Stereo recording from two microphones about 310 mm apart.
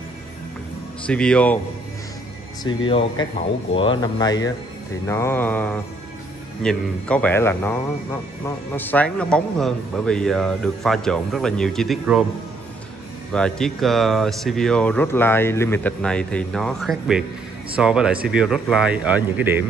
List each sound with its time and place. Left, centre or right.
1.0 s speech: centre
2.6 s speech: centre
13.3 s speech: centre